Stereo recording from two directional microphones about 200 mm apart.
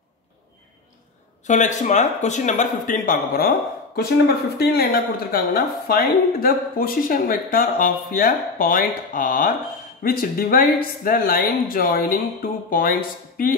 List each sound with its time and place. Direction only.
1.4 s speech: 35° left (ahead or behind)